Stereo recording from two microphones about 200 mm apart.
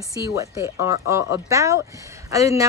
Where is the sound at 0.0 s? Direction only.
15° right (ahead or behind).